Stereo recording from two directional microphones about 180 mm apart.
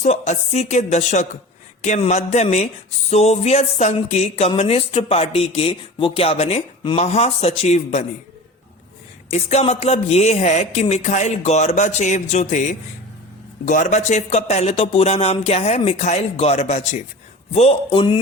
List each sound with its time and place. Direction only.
0.0 s speech: 40° left (ahead or behind)
9.3 s speech: 35° left (ahead or behind)